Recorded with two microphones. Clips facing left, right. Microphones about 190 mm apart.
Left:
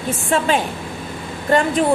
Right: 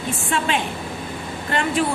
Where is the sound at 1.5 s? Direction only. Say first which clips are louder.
Left 6 dB; 40° left (ahead or behind).